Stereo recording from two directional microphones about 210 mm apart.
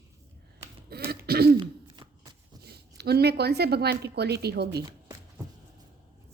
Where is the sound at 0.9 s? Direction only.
45° right (ahead or behind).